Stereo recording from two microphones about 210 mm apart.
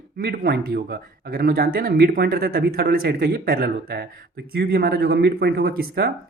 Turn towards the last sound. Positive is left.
turn(degrees=-45)  # may be behind; listen again after turning